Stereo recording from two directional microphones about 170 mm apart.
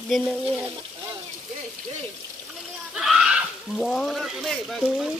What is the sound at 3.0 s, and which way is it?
Speech, 5° right (ahead or behind).